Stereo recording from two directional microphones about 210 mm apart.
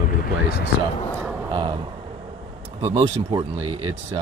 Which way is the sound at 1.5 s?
20° right (ahead or behind).